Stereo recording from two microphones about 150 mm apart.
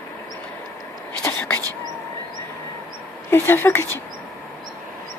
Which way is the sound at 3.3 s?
15° left (ahead or behind).